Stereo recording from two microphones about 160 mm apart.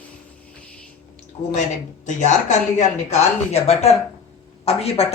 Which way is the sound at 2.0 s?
50° left (ahead or behind).